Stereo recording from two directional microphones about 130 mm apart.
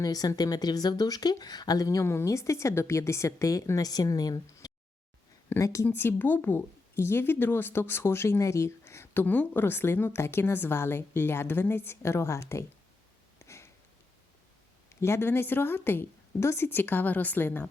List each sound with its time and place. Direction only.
0.0 s a woman's voice: 30° left (ahead or behind)
13.4 s sniff: 20° left (ahead or behind)
15.0 s a woman's voice: 20° left (ahead or behind)